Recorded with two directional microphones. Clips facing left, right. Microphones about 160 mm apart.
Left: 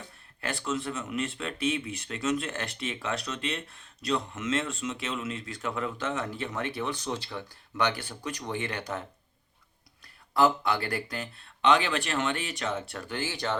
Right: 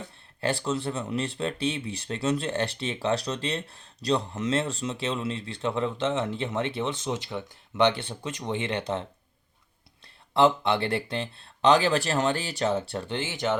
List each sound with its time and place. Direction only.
0.4 s speech: 30° right (ahead or behind)
10.3 s speech: 25° right (ahead or behind)